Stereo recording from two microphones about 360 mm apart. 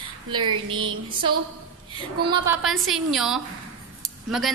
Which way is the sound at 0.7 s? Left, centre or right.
Right.